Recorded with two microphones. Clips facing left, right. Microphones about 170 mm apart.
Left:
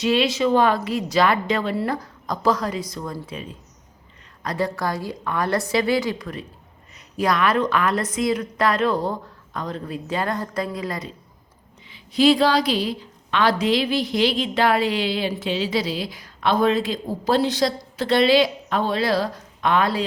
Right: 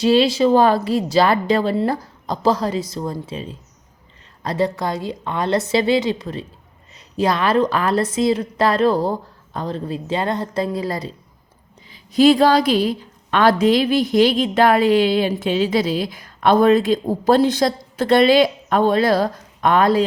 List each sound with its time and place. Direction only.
0.0 s a woman's voice: 35° right (ahead or behind)
11.9 s a woman's voice: 45° right (ahead or behind)